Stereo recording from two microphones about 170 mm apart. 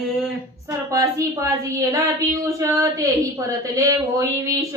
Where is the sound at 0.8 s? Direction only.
20° right (ahead or behind).